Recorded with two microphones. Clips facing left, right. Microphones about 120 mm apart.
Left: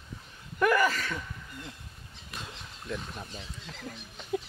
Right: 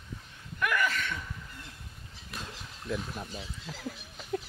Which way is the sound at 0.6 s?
35° left (ahead or behind).